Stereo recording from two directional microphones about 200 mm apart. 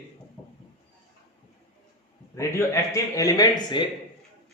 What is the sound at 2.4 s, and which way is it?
A man's voice, 15° left (ahead or behind).